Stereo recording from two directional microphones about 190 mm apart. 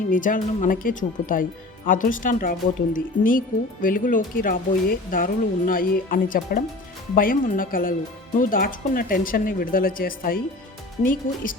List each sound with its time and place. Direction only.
0.1 s speech: 45° left (ahead or behind)